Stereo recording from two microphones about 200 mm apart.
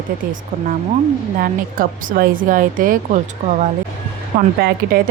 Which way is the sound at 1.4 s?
45° right (ahead or behind).